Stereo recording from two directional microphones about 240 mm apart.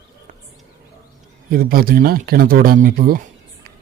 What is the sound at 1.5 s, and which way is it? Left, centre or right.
Speech, right.